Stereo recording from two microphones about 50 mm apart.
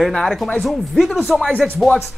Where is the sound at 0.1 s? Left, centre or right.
Centre.